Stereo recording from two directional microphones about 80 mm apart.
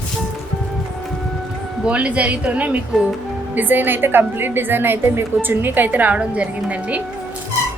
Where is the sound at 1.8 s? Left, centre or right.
Centre.